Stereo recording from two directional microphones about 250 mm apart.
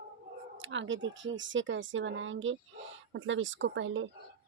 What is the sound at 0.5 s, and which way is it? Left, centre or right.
Speech, right.